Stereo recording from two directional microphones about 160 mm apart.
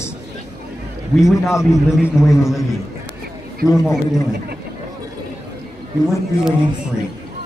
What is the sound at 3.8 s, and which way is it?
Speech, centre (ahead or behind).